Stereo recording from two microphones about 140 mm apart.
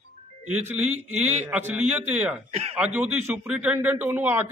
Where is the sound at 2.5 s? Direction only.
50° right (ahead or behind).